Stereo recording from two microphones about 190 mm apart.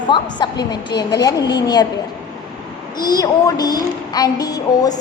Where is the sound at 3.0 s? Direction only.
20° left (ahead or behind).